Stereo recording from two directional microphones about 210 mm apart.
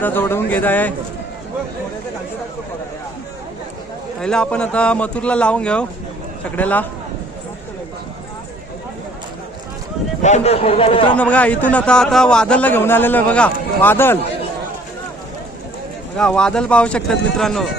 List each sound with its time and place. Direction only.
0.0 s a man's voice: 10° left (ahead or behind)
4.2 s a man's voice: 5° left (ahead or behind)
10.2 s a man's voice: 30° left (ahead or behind)
11.1 s a man's voice: 5° left (ahead or behind)
16.1 s speech: 5° left (ahead or behind)